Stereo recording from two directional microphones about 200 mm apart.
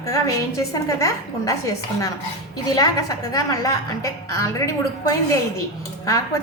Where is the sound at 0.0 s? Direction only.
20° left (ahead or behind).